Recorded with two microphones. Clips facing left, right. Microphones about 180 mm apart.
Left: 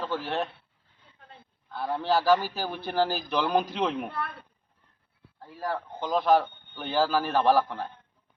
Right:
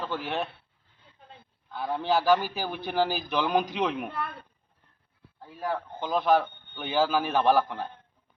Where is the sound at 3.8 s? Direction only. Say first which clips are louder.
Even; 5° right (ahead or behind).